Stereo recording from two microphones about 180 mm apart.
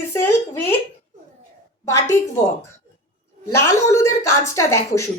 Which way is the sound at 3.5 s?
15° left (ahead or behind).